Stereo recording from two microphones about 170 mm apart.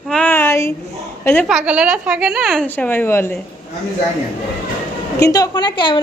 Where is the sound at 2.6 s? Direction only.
10° left (ahead or behind).